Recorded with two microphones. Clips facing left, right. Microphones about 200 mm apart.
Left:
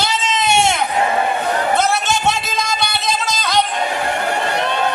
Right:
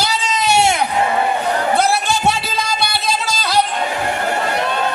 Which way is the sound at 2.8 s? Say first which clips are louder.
Even; 10° right (ahead or behind).